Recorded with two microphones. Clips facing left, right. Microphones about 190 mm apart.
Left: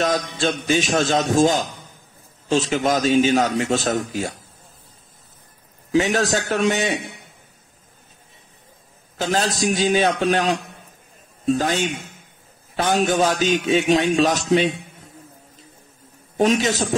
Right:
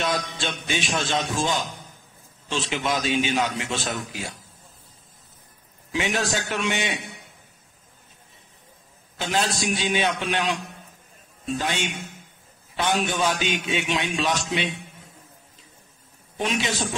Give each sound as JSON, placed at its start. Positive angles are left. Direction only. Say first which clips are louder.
{"t": 0.0, "sound": "a man's voice", "louder": "left 6 dB", "side_deg": 40}
{"t": 5.9, "sound": "a man's voice", "louder": "left 7 dB", "side_deg": 40}
{"t": 9.2, "sound": "a man's voice", "louder": "left 4 dB", "side_deg": 40}
{"t": 16.3, "sound": "a man's voice", "louder": "left 8 dB", "side_deg": 40}